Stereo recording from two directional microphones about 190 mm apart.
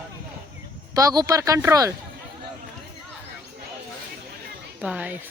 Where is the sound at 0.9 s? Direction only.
20° right (ahead or behind).